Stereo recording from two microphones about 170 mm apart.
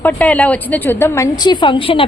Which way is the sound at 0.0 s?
10° left (ahead or behind).